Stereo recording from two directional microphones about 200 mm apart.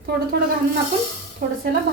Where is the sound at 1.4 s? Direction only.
40° right (ahead or behind).